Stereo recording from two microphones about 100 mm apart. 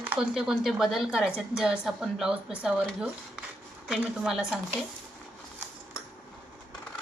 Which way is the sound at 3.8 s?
5° right (ahead or behind).